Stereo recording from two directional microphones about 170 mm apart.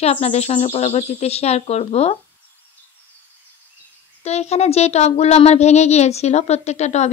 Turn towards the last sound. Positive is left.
turn(degrees=40)  # may be behind; listen again after turning